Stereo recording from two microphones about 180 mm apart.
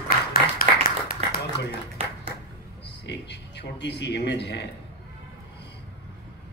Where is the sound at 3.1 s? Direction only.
70° left (ahead or behind).